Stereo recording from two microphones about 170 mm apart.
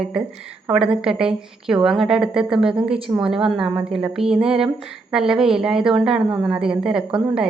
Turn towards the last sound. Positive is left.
turn(degrees=-5)  # may be behind; listen again after turning